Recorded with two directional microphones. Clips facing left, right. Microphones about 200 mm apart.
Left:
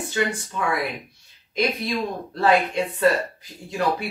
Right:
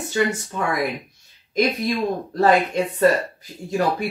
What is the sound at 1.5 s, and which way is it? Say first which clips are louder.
Speech: right 3 dB; 45° right (ahead or behind).